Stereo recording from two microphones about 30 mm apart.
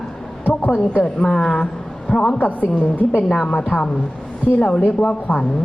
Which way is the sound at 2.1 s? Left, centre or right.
Left.